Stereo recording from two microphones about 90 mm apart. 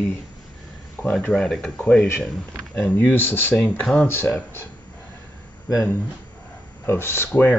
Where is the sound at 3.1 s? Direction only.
25° left (ahead or behind).